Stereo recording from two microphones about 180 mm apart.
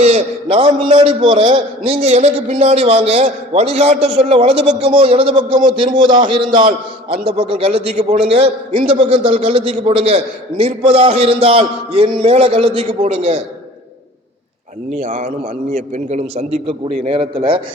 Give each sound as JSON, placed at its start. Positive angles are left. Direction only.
{"t": 0.0, "sound": "a man's voice", "side_deg": -35}
{"t": 14.9, "sound": "a man's voice", "side_deg": -40}